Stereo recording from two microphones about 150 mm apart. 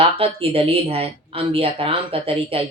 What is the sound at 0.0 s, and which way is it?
A woman's voice, 40° right (ahead or behind).